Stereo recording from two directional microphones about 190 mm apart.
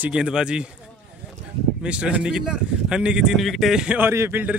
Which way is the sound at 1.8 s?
5° right (ahead or behind).